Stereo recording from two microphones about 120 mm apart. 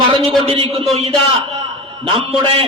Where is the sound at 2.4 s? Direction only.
50° right (ahead or behind).